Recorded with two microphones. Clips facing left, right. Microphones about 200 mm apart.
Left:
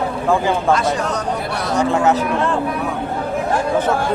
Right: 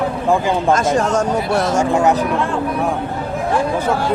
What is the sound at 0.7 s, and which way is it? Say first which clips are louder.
Speech: right 5 dB; 45° right (ahead or behind).